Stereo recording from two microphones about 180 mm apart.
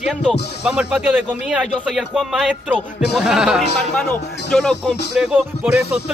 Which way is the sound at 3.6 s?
65° left (ahead or behind).